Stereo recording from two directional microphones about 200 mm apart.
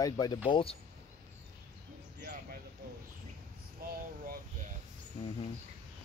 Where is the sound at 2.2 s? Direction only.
55° right (ahead or behind).